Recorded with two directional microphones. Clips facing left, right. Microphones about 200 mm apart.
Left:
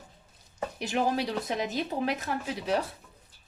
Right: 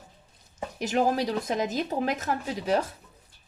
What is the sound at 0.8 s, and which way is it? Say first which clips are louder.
Speech: right 3 dB; 40° right (ahead or behind).